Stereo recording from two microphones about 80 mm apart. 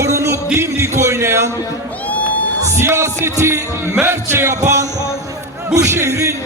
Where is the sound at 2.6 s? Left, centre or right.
Right.